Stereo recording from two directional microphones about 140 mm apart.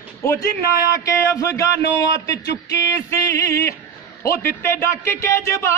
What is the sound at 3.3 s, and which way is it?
A man's voice, 20° left (ahead or behind).